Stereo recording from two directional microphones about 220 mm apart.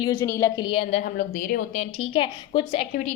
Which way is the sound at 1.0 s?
35° left (ahead or behind).